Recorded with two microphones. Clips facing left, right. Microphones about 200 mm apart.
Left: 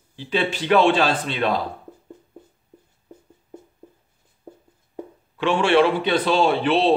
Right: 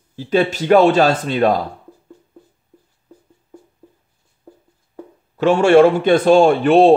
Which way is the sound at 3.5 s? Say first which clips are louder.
Left 1 dB; 20° left (ahead or behind).